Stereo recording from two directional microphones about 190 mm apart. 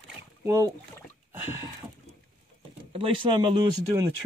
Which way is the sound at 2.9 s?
30° right (ahead or behind).